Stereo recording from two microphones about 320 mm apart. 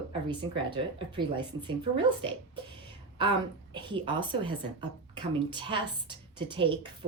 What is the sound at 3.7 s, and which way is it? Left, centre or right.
A woman's voice, centre.